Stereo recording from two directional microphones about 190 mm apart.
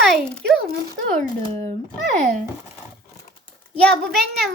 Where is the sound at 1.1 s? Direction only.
35° right (ahead or behind).